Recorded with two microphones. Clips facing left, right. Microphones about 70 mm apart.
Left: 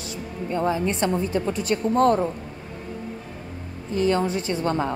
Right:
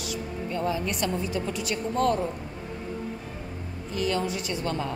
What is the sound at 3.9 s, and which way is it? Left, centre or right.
A woman's voice, left.